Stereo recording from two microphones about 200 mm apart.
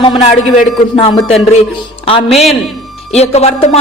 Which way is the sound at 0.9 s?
30° left (ahead or behind).